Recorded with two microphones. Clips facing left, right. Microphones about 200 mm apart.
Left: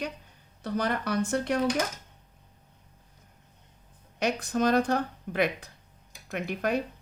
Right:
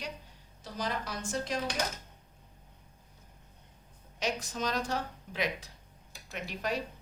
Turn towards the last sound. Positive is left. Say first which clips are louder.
# left 7 dB
turn(degrees=55)  # may be behind; listen again after turning